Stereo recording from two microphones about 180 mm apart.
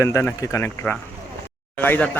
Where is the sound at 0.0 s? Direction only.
15° left (ahead or behind).